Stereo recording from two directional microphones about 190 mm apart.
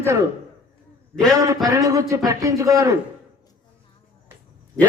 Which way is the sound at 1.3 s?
15° right (ahead or behind).